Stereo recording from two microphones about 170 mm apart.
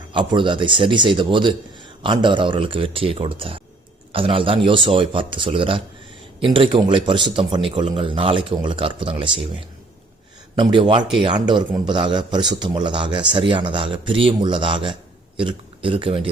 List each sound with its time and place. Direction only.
0.1 s a man's voice: 30° right (ahead or behind)